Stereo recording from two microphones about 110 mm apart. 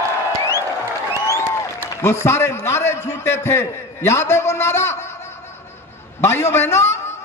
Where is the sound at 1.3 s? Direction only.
25° left (ahead or behind).